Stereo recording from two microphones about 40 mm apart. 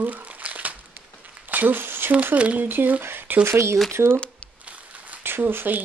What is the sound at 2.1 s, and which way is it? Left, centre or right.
Speech, right.